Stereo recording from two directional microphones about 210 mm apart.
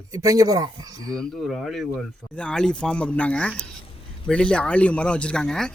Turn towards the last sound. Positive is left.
turn(degrees=5)  # may be behind; listen again after turning